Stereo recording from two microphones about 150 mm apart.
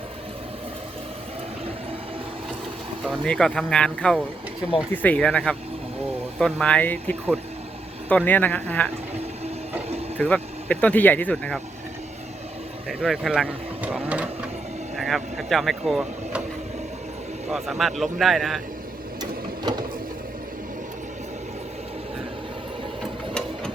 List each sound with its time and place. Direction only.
3.2 s speech: 5° left (ahead or behind)
10.2 s speech: 10° left (ahead or behind)
12.9 s speech: centre (ahead or behind)
17.5 s speech: centre (ahead or behind)
19.2 s mechanisms: 25° right (ahead or behind)